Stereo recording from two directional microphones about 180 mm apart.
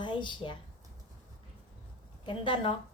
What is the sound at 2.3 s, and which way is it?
Speech, 25° left (ahead or behind).